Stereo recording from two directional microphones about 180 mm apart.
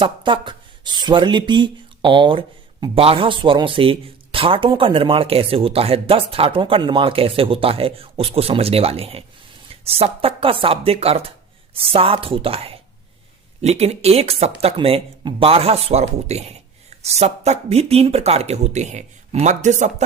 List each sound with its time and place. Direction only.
0.0 s a man's voice: 25° right (ahead or behind)